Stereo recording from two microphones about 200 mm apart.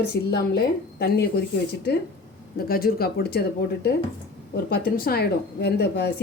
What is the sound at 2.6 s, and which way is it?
Speech, 50° left (ahead or behind).